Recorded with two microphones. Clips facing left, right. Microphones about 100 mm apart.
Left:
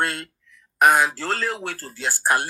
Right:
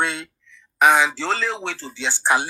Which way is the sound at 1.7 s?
45° left (ahead or behind).